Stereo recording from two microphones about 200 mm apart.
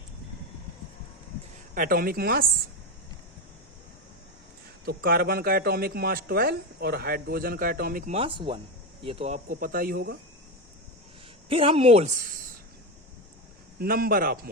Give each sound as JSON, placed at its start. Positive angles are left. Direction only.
{"t": 1.7, "sound": "a man's voice", "side_deg": -45}
{"t": 4.9, "sound": "a man's voice", "side_deg": -50}
{"t": 8.1, "sound": "a man's voice", "side_deg": -25}
{"t": 11.4, "sound": "speech", "side_deg": -25}
{"t": 13.7, "sound": "a man's voice", "side_deg": -50}